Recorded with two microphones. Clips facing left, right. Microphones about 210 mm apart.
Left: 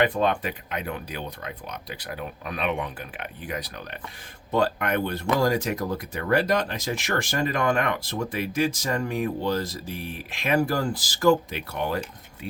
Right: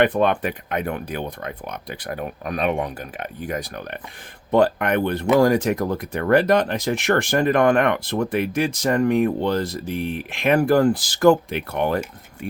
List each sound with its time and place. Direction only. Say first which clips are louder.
0.2 s speech: right 4 dB; 60° right (ahead or behind)
5.4 s speech: right 6 dB; 55° right (ahead or behind)